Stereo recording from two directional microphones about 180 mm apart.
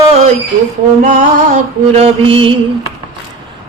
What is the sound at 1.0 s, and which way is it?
Female singing, 45° right (ahead or behind).